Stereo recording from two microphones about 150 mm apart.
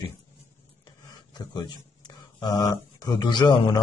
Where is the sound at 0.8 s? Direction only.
30° left (ahead or behind).